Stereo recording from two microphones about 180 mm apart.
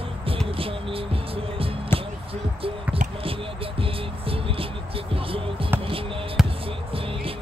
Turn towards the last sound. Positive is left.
turn(degrees=-30)  # may be behind; listen again after turning